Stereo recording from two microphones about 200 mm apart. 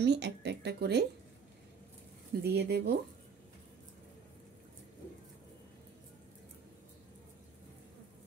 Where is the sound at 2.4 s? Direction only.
55° right (ahead or behind).